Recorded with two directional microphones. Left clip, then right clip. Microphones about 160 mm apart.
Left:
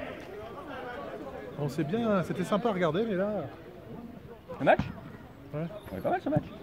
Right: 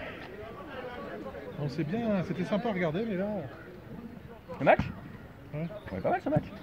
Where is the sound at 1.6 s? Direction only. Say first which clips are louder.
Left 3 dB; 35° left (ahead or behind).